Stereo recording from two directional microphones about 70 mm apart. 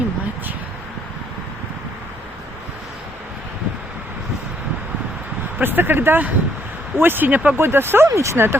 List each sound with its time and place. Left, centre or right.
5.5 s speech: right